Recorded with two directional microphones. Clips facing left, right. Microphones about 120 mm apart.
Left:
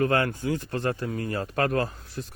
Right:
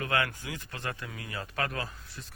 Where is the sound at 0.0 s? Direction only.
35° left (ahead or behind).